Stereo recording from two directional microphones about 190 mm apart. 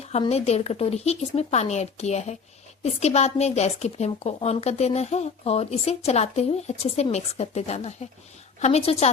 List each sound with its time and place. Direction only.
0.0 s speech: 35° left (ahead or behind)